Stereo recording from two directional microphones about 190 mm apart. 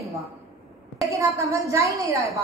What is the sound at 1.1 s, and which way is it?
A woman's voice, 15° right (ahead or behind).